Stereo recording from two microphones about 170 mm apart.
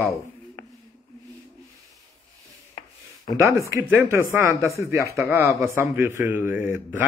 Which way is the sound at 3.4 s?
15° right (ahead or behind).